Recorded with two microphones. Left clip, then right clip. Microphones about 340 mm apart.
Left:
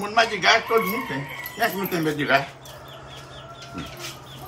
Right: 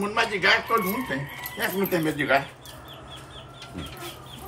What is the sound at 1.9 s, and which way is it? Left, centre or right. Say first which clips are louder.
Speech: left 1 dB; centre.